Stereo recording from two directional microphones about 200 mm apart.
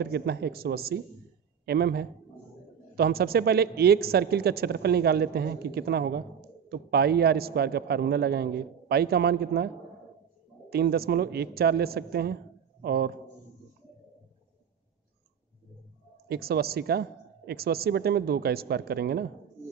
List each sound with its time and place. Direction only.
0.0 s speech: 55° right (ahead or behind)
10.7 s speech: 50° right (ahead or behind)
16.3 s speech: 50° right (ahead or behind)